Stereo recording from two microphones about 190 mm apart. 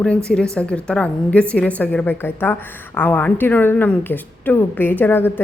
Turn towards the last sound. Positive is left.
turn(degrees=10)  # may be behind; listen again after turning